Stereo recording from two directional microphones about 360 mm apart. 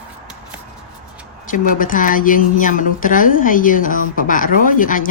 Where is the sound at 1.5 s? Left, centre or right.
Left.